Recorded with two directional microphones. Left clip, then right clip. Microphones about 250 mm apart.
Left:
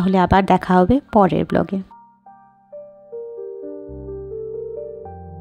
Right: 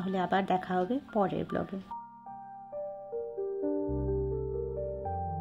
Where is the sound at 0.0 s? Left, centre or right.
Left.